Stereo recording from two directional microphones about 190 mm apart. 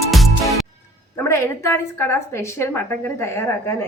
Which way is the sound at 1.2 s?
15° left (ahead or behind).